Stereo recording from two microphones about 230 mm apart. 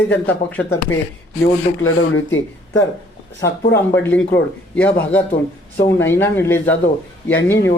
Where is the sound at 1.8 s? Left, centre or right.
Left.